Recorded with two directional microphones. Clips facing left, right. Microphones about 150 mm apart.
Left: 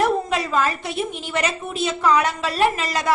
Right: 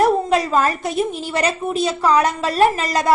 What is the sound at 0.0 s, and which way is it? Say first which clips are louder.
A woman's voice: right 4 dB; 40° right (ahead or behind).